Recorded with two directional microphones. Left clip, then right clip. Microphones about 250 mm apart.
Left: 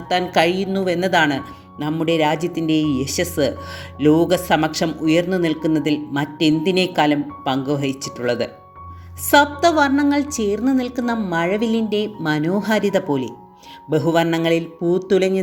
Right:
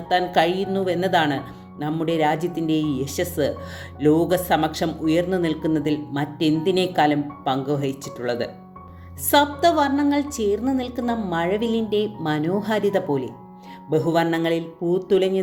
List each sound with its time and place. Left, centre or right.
0.1 s a woman's voice: left